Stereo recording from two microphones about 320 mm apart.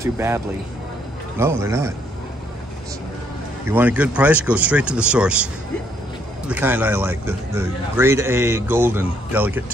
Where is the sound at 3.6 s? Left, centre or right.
Centre.